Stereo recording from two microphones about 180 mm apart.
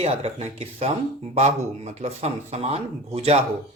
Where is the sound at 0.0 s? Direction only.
35° right (ahead or behind).